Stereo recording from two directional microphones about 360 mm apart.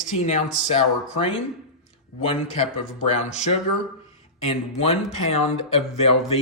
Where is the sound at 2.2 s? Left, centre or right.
Centre.